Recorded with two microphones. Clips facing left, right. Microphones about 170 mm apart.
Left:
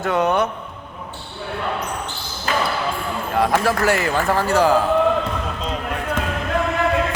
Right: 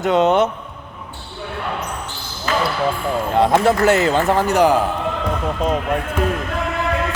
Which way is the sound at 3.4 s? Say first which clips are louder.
Right 3 dB; 20° right (ahead or behind).